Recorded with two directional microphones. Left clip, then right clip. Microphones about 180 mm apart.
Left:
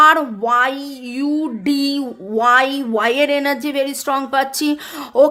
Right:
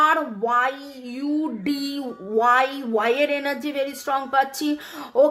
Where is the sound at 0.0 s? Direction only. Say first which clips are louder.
Left 8 dB; 40° left (ahead or behind).